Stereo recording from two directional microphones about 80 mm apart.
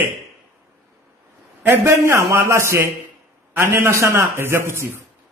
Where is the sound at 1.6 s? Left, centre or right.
Right.